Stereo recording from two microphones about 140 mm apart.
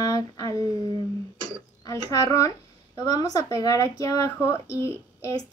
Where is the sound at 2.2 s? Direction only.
25° left (ahead or behind).